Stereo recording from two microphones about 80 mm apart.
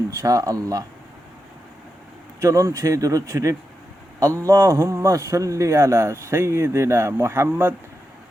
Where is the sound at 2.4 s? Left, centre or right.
Right.